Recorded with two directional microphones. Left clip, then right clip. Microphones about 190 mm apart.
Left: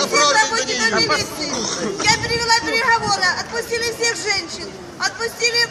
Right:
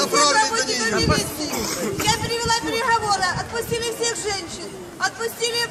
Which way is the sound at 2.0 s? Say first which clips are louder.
Left 5 dB; centre (ahead or behind).